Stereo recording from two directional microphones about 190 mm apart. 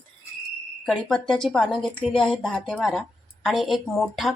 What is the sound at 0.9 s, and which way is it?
A woman's voice, centre (ahead or behind).